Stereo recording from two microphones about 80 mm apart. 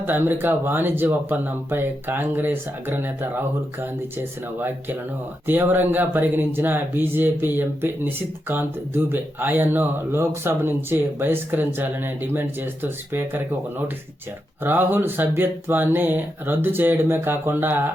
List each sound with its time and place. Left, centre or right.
0.0 s speech: right